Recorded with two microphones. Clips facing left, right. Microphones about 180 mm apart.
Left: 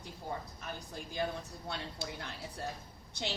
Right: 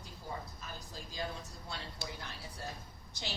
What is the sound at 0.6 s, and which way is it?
Speech, 60° left (ahead or behind).